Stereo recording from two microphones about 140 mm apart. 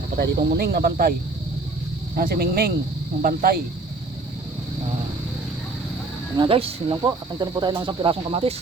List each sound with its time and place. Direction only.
0.3 s speech: 90° right
2.1 s speech: 90° right
6.3 s speech: 35° right (ahead or behind)
7.0 s speech: 30° right (ahead or behind)